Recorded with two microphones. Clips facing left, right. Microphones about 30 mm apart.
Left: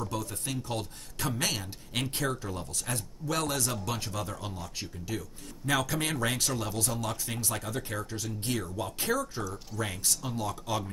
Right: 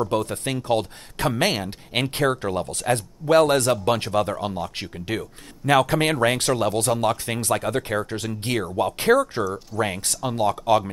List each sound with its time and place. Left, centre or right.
0.0 s speech: right
5.7 s speech: right